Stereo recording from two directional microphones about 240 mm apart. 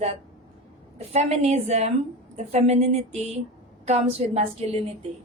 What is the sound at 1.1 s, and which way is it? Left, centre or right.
A woman's voice, right.